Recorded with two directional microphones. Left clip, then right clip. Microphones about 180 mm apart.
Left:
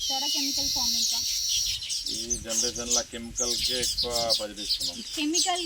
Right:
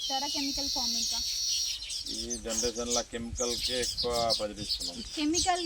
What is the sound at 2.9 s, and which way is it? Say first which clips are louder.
Speech: left 3 dB; 20° right (ahead or behind).